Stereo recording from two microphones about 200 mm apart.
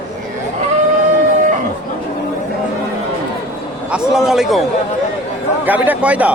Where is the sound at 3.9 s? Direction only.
5° right (ahead or behind).